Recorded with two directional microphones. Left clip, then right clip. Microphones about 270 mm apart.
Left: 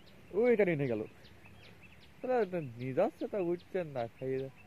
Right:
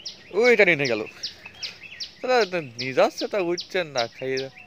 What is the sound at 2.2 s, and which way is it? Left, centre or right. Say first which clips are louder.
Speech: right 11 dB; centre.